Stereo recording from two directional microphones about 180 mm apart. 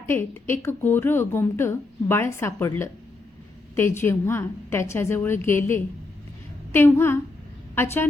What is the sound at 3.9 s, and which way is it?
A woman's voice, 15° left (ahead or behind).